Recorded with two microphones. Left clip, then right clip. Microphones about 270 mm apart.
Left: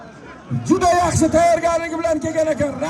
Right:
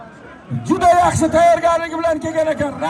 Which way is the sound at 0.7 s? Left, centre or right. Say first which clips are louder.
Right 3 dB; right.